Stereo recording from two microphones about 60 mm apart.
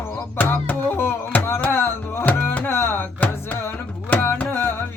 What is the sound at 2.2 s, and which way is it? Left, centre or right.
Music, left.